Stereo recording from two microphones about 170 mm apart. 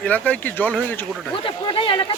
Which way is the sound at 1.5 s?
30° left (ahead or behind).